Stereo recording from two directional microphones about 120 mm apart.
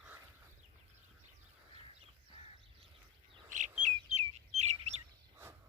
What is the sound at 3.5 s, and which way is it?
Chirp, 90° right.